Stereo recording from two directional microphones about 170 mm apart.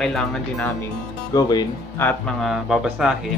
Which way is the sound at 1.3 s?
25° left (ahead or behind).